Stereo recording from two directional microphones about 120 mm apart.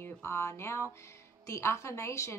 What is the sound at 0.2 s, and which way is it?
Speech, 20° left (ahead or behind).